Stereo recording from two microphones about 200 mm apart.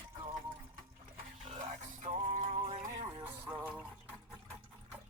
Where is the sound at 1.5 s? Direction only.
35° right (ahead or behind).